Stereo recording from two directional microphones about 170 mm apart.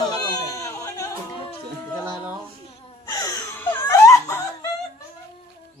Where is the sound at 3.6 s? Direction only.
15° left (ahead or behind).